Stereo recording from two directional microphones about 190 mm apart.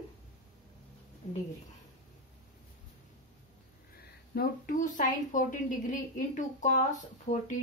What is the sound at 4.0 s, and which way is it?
A woman's voice, 50° left (ahead or behind).